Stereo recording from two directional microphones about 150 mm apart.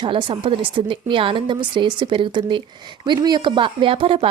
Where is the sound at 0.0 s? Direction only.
35° right (ahead or behind).